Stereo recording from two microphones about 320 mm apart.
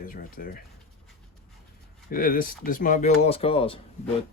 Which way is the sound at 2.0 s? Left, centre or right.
Left.